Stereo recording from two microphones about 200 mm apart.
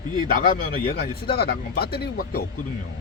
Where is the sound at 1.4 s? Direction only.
50° left (ahead or behind).